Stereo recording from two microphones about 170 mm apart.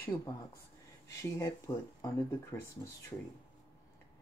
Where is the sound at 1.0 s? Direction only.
20° left (ahead or behind).